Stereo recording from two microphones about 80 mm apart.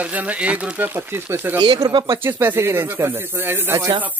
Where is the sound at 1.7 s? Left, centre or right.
Right.